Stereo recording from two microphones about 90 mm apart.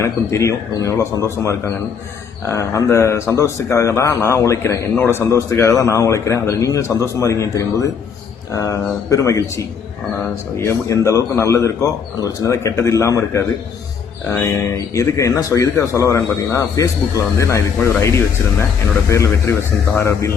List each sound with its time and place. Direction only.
0.0 s speech: 35° left (ahead or behind)
14.9 s speech: 35° left (ahead or behind)